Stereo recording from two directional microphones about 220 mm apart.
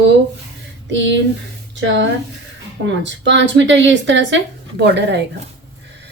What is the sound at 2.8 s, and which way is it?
A woman's voice, 55° right (ahead or behind).